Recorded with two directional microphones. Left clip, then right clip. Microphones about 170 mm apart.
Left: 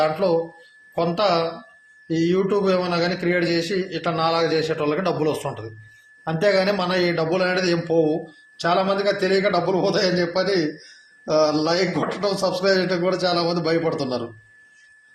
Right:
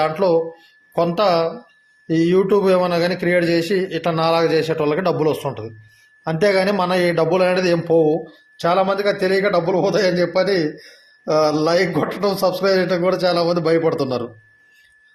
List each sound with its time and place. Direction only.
0.0 s a man's voice: 55° right (ahead or behind)